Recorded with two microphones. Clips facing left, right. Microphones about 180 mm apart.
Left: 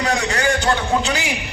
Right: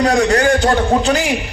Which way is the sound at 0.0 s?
45° right (ahead or behind).